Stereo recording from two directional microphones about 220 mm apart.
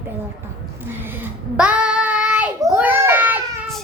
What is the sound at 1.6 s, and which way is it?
Child singing, 5° right (ahead or behind).